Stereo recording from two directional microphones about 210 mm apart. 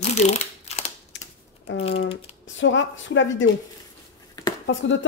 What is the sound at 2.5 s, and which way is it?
Speech, 60° left (ahead or behind).